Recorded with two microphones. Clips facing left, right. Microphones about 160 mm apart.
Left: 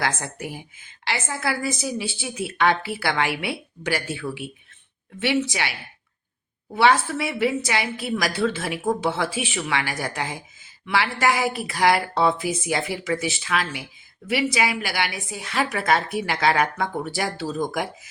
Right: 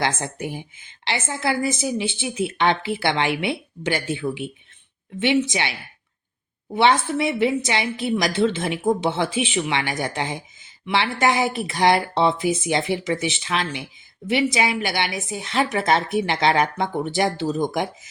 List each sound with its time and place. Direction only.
0.0 s a woman's voice: 25° right (ahead or behind)
6.7 s a woman's voice: 25° right (ahead or behind)